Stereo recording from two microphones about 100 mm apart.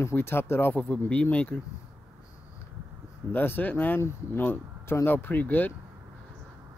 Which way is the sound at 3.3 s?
20° left (ahead or behind).